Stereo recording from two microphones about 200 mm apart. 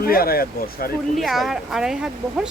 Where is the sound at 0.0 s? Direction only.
50° left (ahead or behind).